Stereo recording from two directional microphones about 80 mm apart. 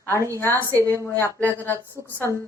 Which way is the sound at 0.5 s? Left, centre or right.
Right.